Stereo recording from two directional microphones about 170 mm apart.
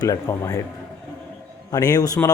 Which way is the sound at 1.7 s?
20° left (ahead or behind).